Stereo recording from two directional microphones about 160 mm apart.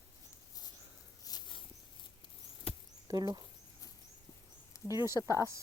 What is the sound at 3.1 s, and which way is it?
Speech, 25° right (ahead or behind).